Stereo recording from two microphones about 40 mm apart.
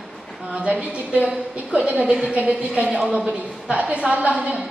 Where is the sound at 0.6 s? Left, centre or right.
Right.